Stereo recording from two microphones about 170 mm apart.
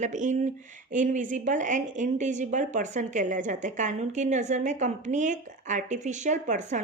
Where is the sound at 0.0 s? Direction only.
45° right (ahead or behind).